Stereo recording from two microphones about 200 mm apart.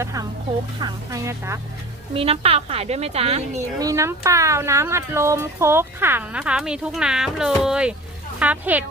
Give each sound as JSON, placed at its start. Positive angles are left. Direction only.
{"t": 0.0, "sound": "speech", "side_deg": -15}
{"t": 2.1, "sound": "a woman's voice", "side_deg": -30}
{"t": 3.8, "sound": "speech", "side_deg": -15}